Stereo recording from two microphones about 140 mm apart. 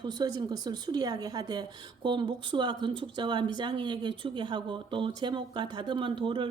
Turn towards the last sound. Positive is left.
turn(degrees=-35)  # may be behind; listen again after turning